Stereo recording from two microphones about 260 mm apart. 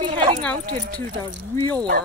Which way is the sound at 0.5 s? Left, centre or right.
Right.